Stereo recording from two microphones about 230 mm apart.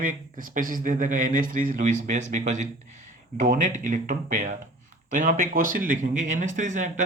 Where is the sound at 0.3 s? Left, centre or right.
Right.